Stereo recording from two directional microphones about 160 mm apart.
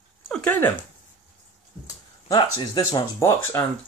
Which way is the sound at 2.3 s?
25° left (ahead or behind).